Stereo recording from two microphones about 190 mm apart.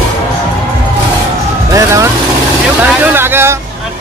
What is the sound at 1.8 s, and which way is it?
Vehicle, 15° right (ahead or behind).